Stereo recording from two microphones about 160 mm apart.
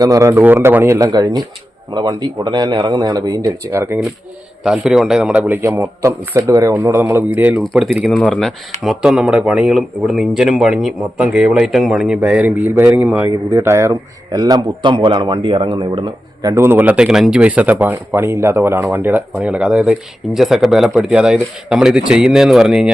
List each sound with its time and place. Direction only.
0.0 s speech: 20° right (ahead or behind)
4.6 s speech: centre (ahead or behind)
7.6 s speech: centre (ahead or behind)